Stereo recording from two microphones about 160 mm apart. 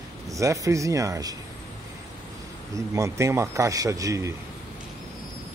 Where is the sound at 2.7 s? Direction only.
20° right (ahead or behind).